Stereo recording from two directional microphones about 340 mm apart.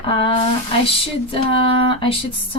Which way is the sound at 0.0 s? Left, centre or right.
Centre.